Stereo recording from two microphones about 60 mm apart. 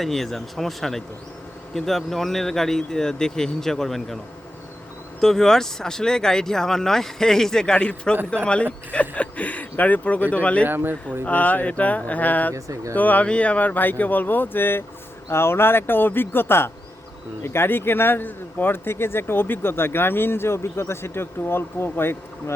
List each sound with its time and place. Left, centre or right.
0.0 s speech: centre
5.2 s speech: centre; by 10.6 s left
10.6 s speech: right
11.3 s speech: left
12.5 s speech: right
12.9 s speech: left